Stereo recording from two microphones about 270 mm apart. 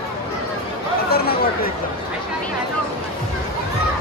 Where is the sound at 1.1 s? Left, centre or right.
Left.